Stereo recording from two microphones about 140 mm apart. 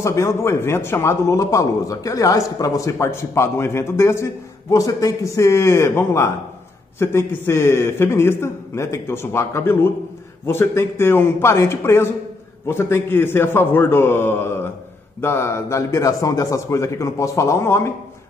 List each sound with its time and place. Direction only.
0.0 s a man's voice: 20° left (ahead or behind)